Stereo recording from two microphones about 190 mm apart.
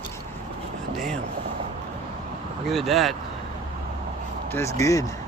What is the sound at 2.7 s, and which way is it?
Speech, centre (ahead or behind).